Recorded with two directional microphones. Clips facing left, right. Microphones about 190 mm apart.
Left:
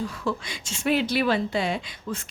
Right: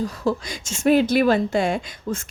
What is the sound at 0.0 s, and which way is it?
A woman's voice, 40° right (ahead or behind).